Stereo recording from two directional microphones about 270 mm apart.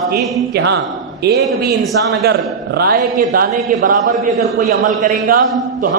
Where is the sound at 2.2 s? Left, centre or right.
Right.